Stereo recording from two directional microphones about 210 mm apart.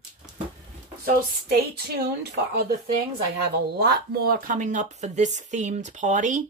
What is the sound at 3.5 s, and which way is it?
Speech, 50° right (ahead or behind).